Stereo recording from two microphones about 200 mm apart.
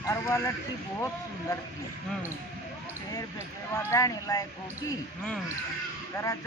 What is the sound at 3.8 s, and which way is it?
Speech, 15° left (ahead or behind).